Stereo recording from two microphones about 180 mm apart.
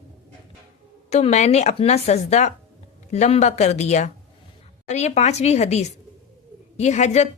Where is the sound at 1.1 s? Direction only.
40° left (ahead or behind).